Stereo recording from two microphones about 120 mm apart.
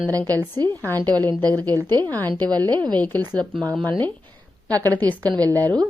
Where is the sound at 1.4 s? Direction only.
30° right (ahead or behind).